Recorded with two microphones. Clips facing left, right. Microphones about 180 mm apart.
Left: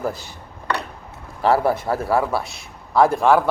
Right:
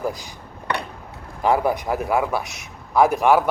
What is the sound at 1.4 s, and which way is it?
A man's voice, 15° right (ahead or behind).